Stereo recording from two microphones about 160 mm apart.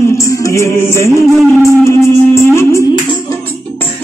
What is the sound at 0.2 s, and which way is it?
Music, 20° left (ahead or behind).